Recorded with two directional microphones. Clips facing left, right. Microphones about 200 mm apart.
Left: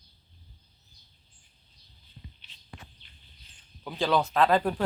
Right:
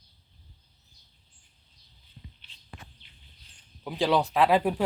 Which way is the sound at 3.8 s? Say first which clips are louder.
Right 1 dB; 15° right (ahead or behind).